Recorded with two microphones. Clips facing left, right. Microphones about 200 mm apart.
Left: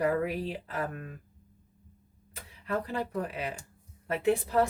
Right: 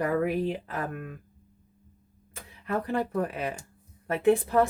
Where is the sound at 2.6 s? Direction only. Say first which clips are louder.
Right 4 dB; 55° right (ahead or behind).